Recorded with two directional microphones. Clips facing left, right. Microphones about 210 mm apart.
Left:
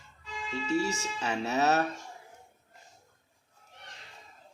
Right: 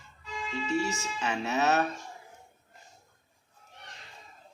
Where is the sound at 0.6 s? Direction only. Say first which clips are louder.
Left 1 dB; 35° left (ahead or behind).